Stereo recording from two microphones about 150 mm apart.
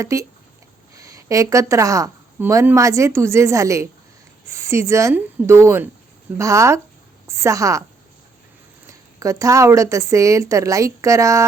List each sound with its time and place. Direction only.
0.0 s a woman's voice: 20° right (ahead or behind)
8.9 s a woman's voice: 20° right (ahead or behind)